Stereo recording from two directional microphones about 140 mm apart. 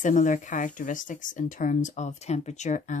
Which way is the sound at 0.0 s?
65° left (ahead or behind).